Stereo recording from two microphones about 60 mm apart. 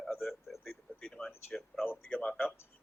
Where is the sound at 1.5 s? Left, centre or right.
Centre.